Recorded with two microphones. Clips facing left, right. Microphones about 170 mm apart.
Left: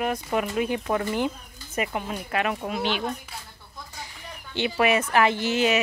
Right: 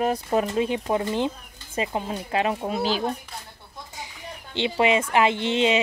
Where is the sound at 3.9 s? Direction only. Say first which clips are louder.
Right 3 dB; 20° right (ahead or behind).